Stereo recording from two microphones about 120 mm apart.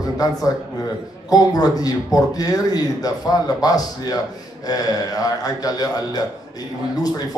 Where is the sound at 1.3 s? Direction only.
30° left (ahead or behind).